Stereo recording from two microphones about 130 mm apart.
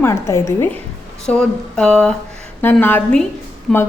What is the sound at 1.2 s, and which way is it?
Speech, 5° left (ahead or behind).